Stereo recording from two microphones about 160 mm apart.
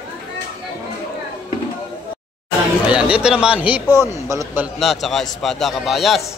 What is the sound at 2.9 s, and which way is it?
Speech, 5° right (ahead or behind).